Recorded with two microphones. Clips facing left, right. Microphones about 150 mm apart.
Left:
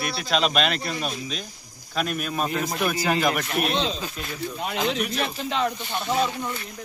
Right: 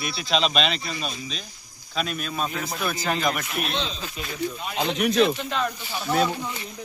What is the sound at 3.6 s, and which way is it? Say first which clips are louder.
Speech: left 5 dB; 40° left (ahead or behind).